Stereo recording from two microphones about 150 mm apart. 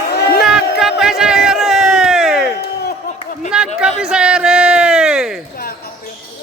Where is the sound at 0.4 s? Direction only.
Centre (ahead or behind).